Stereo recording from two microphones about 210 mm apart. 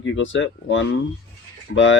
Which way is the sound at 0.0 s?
65° left (ahead or behind).